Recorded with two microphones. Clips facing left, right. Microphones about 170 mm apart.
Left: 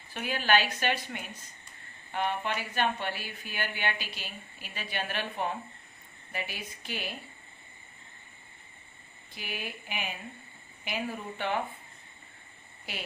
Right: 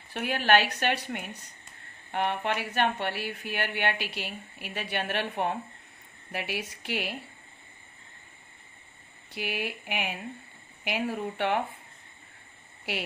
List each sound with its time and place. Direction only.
0.1 s speech: 65° right (ahead or behind)
9.3 s speech: 70° right (ahead or behind)